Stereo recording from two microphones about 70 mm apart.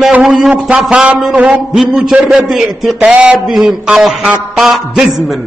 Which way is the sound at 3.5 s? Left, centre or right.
Centre.